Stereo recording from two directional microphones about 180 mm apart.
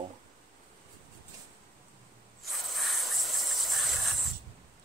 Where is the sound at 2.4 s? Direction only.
Centre (ahead or behind).